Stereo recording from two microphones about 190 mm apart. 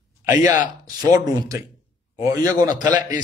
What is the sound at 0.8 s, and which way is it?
A man's voice, 20° right (ahead or behind).